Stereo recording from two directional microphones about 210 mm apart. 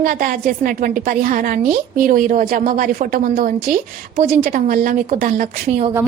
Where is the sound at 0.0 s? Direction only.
40° right (ahead or behind).